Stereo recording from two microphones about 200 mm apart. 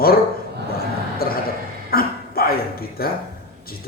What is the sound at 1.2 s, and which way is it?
Speech, 50° left (ahead or behind).